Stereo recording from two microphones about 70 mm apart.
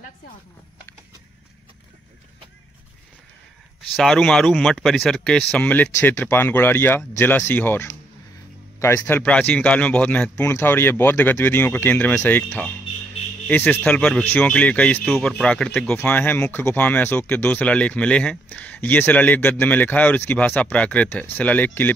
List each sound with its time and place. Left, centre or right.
3.9 s speech: centre; by 7.9 s left
8.7 s a sound: left
9.2 s speech: centre
10.4 s speech: left
13.5 s speech: left
13.8 s speech: centre
16.0 s speech: left
18.8 s speech: left